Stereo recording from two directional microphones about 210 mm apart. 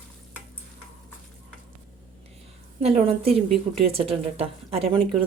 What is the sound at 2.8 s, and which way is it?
A woman's voice, 30° right (ahead or behind).